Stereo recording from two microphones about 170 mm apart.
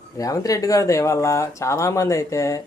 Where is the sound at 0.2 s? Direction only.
20° left (ahead or behind).